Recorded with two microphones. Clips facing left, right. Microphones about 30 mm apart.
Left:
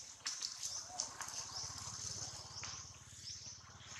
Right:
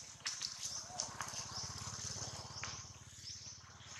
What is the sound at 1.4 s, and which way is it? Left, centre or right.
Vehicle, right.